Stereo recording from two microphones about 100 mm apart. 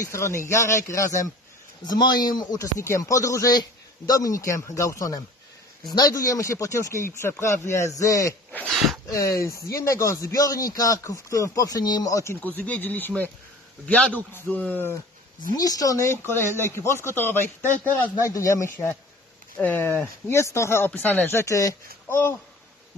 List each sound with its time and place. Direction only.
0.0 s speech: 30° left (ahead or behind)
1.9 s speech: 45° left (ahead or behind)
8.6 s a sound: centre (ahead or behind)
9.1 s speech: 35° left (ahead or behind)
12.4 s speech: 15° left (ahead or behind)
15.5 s speech: 40° left (ahead or behind); by 18.3 s 20° left (ahead or behind)
18.3 s speech: 30° left (ahead or behind)
19.6 s speech: 20° left (ahead or behind)